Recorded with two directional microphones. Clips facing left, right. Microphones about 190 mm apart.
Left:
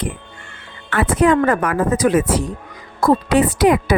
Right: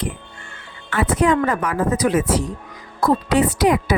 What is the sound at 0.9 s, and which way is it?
A woman's voice, 60° left (ahead or behind).